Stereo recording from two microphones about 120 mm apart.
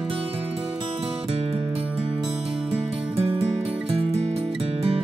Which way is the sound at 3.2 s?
50° right (ahead or behind).